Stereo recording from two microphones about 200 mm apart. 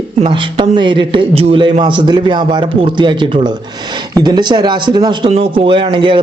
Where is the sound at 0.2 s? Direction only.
25° right (ahead or behind).